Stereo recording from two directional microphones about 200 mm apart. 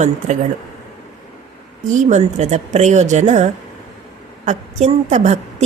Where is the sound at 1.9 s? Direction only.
35° right (ahead or behind).